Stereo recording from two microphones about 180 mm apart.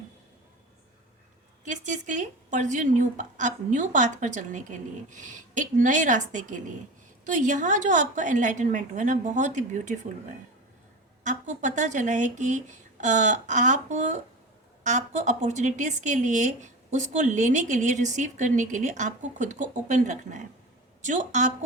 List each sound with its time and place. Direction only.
1.6 s speech: 45° right (ahead or behind)
11.2 s speech: 45° right (ahead or behind)